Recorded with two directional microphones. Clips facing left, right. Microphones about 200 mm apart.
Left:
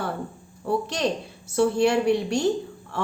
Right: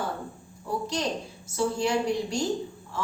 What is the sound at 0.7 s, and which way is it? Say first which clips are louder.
A woman's voice: left 5 dB; 65° left (ahead or behind).